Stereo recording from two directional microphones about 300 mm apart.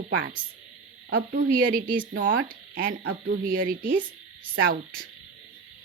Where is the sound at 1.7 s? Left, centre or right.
Right.